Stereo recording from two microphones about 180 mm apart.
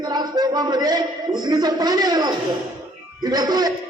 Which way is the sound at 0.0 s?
20° right (ahead or behind).